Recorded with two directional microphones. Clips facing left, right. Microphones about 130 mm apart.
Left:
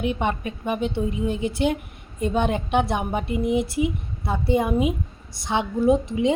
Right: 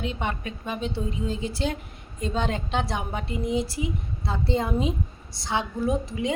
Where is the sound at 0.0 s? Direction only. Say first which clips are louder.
Left 5 dB; 20° left (ahead or behind).